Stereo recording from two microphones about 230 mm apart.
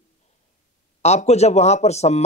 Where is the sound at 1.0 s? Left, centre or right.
Left.